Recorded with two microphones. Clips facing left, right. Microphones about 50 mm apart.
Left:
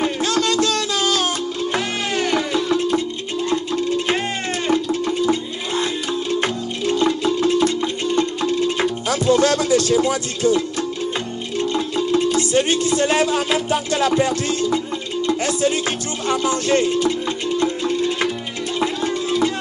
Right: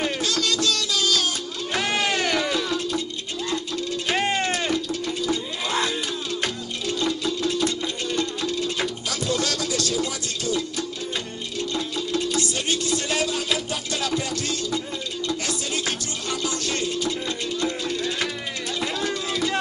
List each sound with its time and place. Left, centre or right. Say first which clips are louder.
0.2 s music: left 6 dB; left
4.6 s a sound: left 6 dB; left
6.4 s music: left 6 dB; left
16.3 s speech: left 9 dB; left
17.6 s music: left 8 dB; left